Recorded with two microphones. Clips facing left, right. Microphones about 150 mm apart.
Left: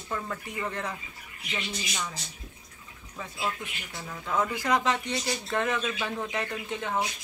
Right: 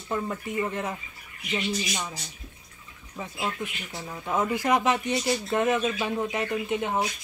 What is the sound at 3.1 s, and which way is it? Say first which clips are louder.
Speech: right 2 dB; 20° right (ahead or behind).